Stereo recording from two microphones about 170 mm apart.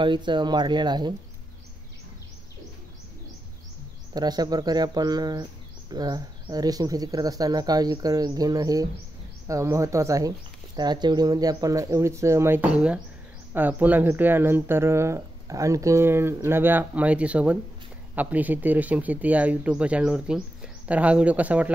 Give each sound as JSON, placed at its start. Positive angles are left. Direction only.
{"t": 0.0, "sound": "speech", "side_deg": -30}
{"t": 4.1, "sound": "speech", "side_deg": -25}